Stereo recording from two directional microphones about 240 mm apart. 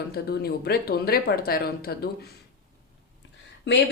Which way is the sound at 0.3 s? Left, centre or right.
Left.